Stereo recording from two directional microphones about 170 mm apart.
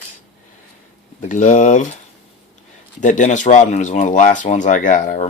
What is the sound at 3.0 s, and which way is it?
Speech, 45° left (ahead or behind).